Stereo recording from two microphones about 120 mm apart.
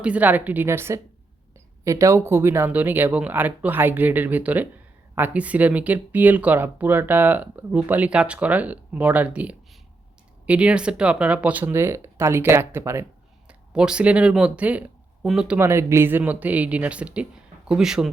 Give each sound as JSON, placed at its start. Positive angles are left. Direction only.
{"t": 0.0, "sound": "speech", "side_deg": -10}
{"t": 13.5, "sound": "speech", "side_deg": -10}
{"t": 15.5, "sound": "speech", "side_deg": -20}